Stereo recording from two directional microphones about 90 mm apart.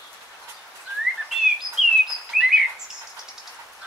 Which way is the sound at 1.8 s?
5° right (ahead or behind).